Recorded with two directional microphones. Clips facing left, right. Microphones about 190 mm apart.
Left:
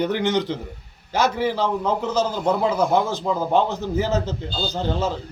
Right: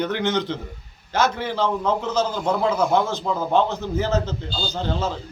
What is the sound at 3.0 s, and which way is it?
A man's voice, 15° left (ahead or behind).